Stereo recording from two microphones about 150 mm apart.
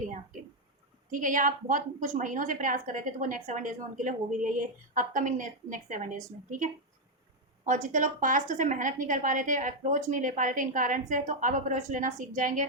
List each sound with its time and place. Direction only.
1.1 s a woman's voice: 60° right (ahead or behind)
7.6 s a woman's voice: 55° right (ahead or behind)